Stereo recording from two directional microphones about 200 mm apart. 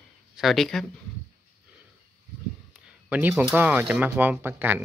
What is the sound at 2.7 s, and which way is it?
Speech, 10° right (ahead or behind).